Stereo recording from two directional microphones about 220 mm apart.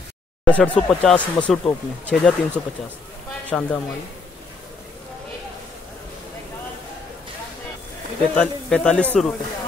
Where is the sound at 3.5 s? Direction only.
5° left (ahead or behind).